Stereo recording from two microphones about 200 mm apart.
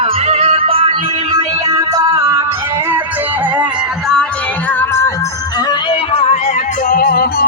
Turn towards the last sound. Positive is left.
turn(degrees=50)  # may be behind; listen again after turning